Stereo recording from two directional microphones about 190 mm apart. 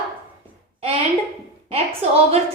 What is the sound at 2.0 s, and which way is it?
Speech, 30° right (ahead or behind).